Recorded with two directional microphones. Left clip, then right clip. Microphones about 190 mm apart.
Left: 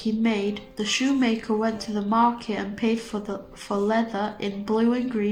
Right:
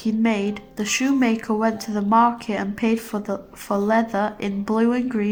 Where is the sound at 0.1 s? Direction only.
45° right (ahead or behind).